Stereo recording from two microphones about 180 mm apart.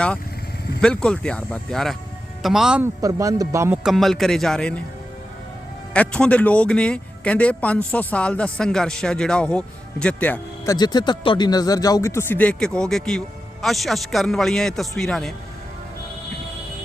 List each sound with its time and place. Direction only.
0.8 s speech: 5° left (ahead or behind)
3.0 s a man's voice: 20° right (ahead or behind)
3.8 s speech: centre (ahead or behind)
5.9 s a man's voice: 5° left (ahead or behind)
10.8 s speech: 25° left (ahead or behind); by 15.3 s centre (ahead or behind)